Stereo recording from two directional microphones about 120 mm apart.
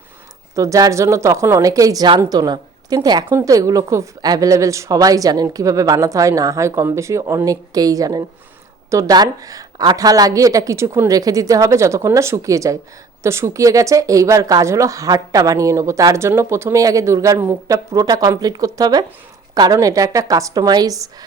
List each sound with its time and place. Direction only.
0.5 s speech: 25° right (ahead or behind)